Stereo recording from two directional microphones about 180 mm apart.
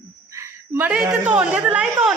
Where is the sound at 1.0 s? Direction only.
10° right (ahead or behind).